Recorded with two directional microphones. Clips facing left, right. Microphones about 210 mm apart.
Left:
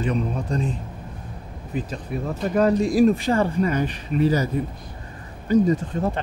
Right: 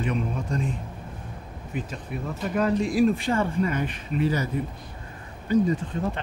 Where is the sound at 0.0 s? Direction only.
35° left (ahead or behind).